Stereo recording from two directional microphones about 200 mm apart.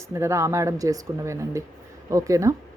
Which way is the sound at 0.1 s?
15° right (ahead or behind).